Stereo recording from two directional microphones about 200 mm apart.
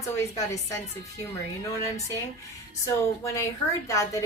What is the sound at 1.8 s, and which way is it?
A woman's voice, 15° left (ahead or behind).